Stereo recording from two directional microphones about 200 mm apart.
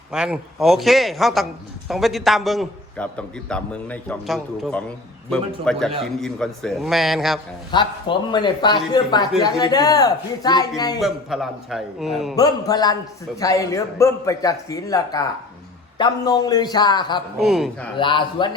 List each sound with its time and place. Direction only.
0.1 s a man's voice: 5° right (ahead or behind)
7.7 s a man's voice: 20° left (ahead or behind)
11.0 s a man's voice: centre (ahead or behind)
12.4 s a man's voice: 20° left (ahead or behind)
17.4 s a man's voice: centre (ahead or behind)
17.9 s a man's voice: 25° left (ahead or behind)